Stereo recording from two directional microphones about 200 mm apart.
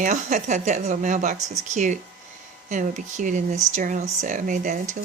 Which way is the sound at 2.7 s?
40° right (ahead or behind).